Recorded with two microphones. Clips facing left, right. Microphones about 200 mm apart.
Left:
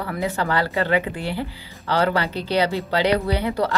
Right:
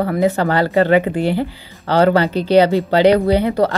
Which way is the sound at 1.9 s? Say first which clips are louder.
Right 8 dB; 50° right (ahead or behind).